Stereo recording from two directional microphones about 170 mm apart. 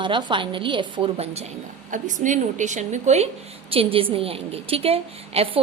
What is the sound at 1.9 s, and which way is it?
A woman's voice, 50° right (ahead or behind).